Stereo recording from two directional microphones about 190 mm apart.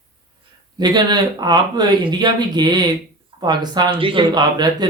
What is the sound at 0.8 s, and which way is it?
Speech, 20° right (ahead or behind).